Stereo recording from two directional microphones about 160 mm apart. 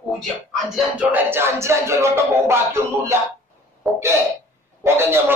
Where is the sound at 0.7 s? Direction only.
10° right (ahead or behind).